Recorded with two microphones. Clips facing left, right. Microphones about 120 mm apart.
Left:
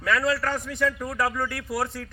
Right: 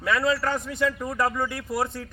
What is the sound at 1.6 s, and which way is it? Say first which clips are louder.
Speech: right 1 dB; centre (ahead or behind).